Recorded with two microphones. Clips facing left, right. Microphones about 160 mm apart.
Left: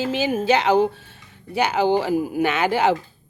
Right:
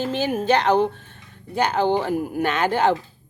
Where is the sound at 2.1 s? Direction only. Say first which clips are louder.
Left 2 dB; 20° right (ahead or behind).